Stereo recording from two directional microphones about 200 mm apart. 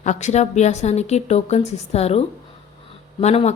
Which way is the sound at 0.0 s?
35° left (ahead or behind).